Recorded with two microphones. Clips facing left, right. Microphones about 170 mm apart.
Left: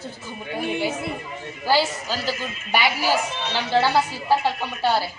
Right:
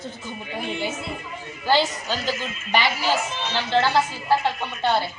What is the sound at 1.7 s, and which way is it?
A woman's voice, 5° left (ahead or behind).